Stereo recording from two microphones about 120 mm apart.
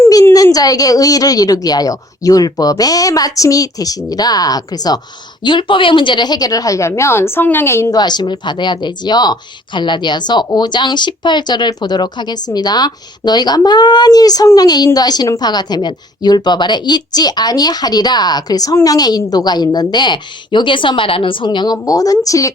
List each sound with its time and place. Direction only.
0.3 s a woman's voice: 30° left (ahead or behind)
7.9 s a woman's voice: 35° left (ahead or behind)